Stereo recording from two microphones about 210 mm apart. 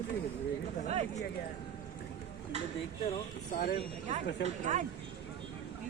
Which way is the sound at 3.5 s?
45° left (ahead or behind).